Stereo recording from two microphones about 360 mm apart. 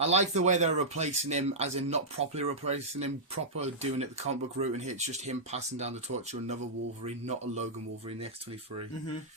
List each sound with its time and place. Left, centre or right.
0.0 s speech: centre
7.0 s a man's voice: centre